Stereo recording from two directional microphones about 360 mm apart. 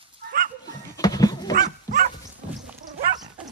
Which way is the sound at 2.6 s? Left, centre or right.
Centre.